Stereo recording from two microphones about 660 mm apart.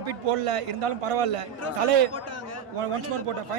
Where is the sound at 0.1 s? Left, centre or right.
Right.